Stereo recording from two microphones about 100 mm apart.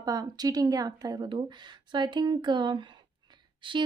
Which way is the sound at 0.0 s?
40° right (ahead or behind).